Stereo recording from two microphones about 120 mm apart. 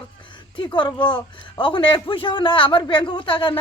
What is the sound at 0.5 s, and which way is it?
A man's voice, 40° left (ahead or behind).